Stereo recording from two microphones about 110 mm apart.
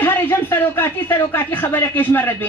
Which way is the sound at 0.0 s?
20° left (ahead or behind).